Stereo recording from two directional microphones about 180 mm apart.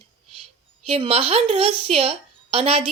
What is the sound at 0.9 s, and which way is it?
A woman's voice, 35° right (ahead or behind).